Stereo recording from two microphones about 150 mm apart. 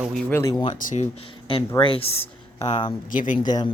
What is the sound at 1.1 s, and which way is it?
Speech, 40° left (ahead or behind).